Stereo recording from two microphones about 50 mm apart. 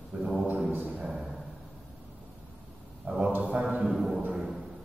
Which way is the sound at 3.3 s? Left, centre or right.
Right.